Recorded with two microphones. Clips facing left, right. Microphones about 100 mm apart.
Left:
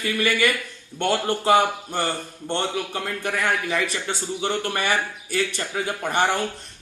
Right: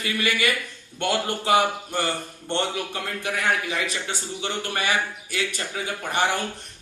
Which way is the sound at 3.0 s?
50° left (ahead or behind).